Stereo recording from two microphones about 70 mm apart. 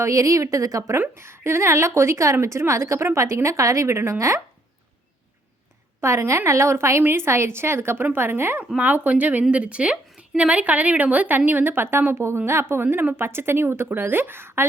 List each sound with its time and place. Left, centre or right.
0.0 s a woman's voice: right
0.9 s a woman's voice: right
6.0 s a woman's voice: right